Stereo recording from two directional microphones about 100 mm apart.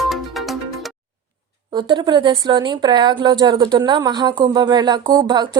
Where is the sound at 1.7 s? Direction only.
50° right (ahead or behind).